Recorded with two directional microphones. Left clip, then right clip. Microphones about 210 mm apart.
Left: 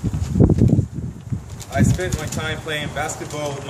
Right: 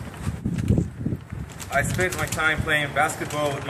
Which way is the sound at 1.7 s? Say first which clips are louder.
Even; 15° left (ahead or behind).